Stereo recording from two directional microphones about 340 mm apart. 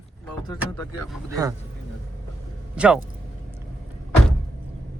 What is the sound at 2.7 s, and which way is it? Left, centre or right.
Speech, centre.